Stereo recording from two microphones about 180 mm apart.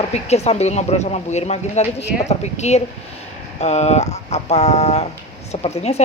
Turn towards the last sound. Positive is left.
turn(degrees=35)  # may be behind; listen again after turning